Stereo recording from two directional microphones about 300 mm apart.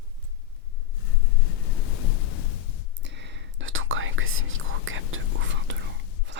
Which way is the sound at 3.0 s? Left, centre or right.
Right.